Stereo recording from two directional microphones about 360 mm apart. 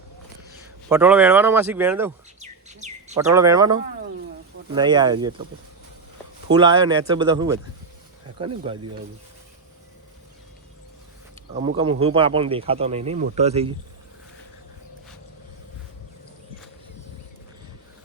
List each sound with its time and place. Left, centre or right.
0.9 s speech: centre
2.4 s bird: centre
3.2 s speech: centre
6.5 s speech: centre
8.7 s speech: centre
11.9 s speech: centre